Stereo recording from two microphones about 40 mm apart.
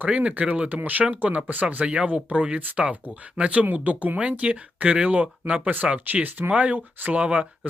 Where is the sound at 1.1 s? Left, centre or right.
Right.